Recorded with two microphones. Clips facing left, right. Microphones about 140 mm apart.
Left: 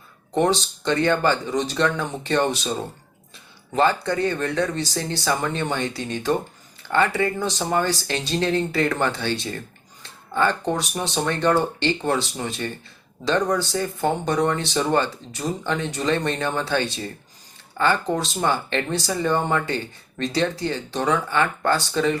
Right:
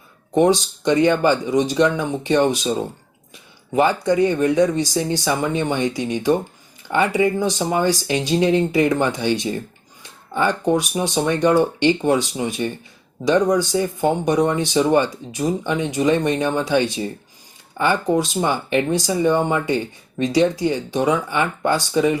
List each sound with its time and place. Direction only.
0.3 s speech: 10° right (ahead or behind)
4.0 s speech: 15° right (ahead or behind)